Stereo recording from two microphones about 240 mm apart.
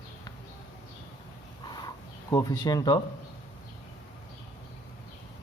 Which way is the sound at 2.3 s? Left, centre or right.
Centre.